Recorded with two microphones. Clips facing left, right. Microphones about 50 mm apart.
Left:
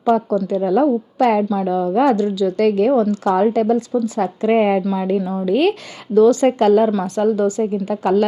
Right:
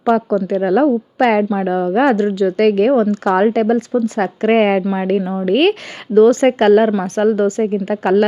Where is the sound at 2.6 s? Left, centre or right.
Right.